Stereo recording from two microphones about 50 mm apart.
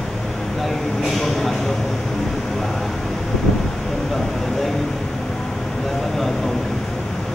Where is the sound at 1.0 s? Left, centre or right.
Centre.